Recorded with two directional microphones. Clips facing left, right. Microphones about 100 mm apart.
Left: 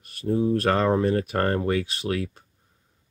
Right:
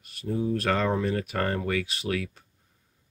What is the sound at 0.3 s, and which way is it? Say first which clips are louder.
Speech: left 5 dB; 50° left (ahead or behind).